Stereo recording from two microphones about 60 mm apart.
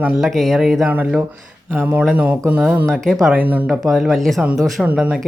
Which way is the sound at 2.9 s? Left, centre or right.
Centre.